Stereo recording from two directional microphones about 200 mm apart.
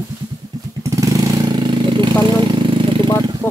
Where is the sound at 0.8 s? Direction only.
15° right (ahead or behind).